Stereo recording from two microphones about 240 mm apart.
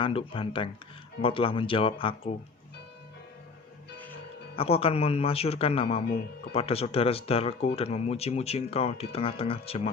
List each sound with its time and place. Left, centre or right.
0.0 s speech: left
4.5 s speech: left